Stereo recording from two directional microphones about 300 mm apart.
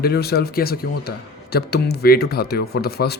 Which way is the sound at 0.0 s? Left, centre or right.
Left.